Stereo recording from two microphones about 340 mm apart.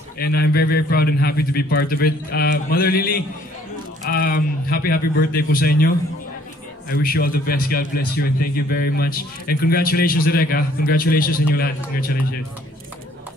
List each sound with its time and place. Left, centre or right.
0.2 s a man's voice: left